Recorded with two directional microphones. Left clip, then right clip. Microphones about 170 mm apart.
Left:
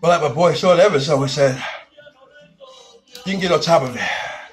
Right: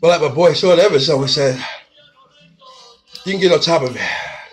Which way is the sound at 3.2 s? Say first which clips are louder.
Right 5 dB; 30° right (ahead or behind).